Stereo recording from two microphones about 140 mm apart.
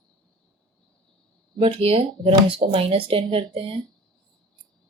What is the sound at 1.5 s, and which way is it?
Speech, 40° right (ahead or behind).